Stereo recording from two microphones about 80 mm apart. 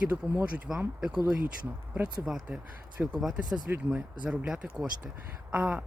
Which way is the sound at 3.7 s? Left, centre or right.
Centre.